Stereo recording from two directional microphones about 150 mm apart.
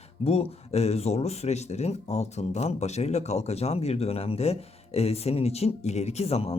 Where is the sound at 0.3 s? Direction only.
45° left (ahead or behind).